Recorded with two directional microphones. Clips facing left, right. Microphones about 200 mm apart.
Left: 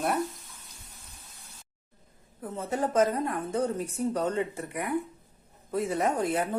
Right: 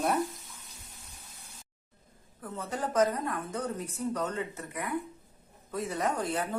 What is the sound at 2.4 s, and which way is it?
A woman's voice, 25° left (ahead or behind).